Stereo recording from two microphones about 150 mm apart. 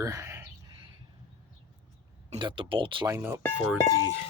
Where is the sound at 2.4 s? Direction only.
35° right (ahead or behind).